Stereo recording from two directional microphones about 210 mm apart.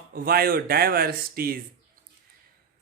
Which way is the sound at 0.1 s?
45° right (ahead or behind).